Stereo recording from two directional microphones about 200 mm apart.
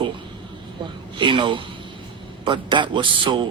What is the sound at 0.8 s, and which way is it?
A woman's voice, 25° right (ahead or behind).